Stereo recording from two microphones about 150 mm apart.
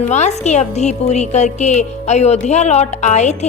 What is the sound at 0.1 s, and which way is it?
Speech, 50° left (ahead or behind).